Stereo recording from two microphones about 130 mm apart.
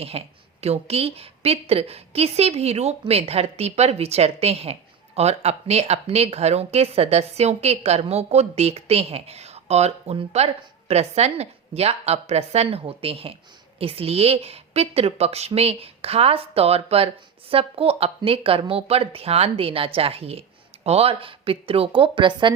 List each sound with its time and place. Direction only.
0.1 s a woman's voice: 50° right (ahead or behind)